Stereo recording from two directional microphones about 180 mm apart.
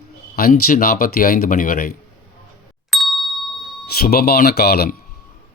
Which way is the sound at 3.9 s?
60° left (ahead or behind).